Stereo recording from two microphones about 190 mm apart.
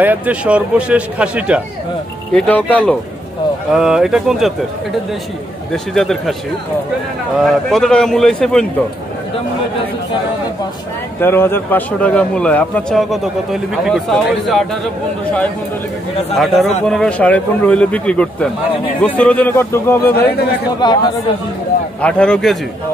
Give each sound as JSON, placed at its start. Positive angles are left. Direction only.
{"t": 0.0, "sound": "speech", "side_deg": -10}
{"t": 2.3, "sound": "a man's voice", "side_deg": 5}
{"t": 5.7, "sound": "a man's voice", "side_deg": 0}
{"t": 7.4, "sound": "a man's voice", "side_deg": 0}
{"t": 11.1, "sound": "a man's voice", "side_deg": 10}
{"t": 16.3, "sound": "a man's voice", "side_deg": 0}
{"t": 20.8, "sound": "speech", "side_deg": 25}
{"t": 22.0, "sound": "a man's voice", "side_deg": 5}